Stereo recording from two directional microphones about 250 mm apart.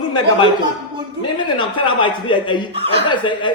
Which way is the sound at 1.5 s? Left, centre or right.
Centre.